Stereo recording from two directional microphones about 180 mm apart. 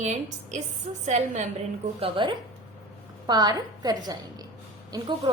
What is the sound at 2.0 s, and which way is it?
A woman's voice, 30° right (ahead or behind).